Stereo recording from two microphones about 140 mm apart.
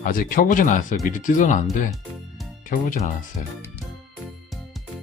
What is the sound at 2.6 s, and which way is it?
Speech, 70° left (ahead or behind).